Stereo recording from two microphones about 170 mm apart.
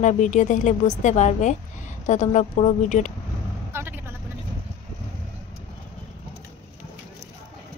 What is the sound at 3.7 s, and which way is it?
Vehicle, 15° right (ahead or behind).